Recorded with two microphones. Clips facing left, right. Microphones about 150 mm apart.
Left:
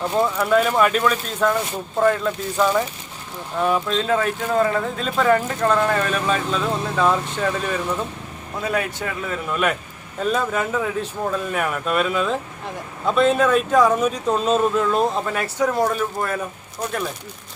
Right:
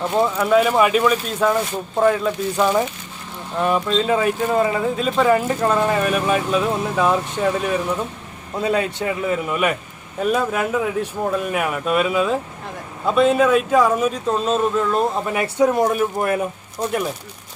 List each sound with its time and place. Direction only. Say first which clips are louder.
0.2 s speech: right 2 dB; 5° right (ahead or behind)
8.6 s a man's voice: right 4 dB; 25° right (ahead or behind); by 15.0 s centre (ahead or behind)
15.3 s speech: right 4 dB; 20° right (ahead or behind)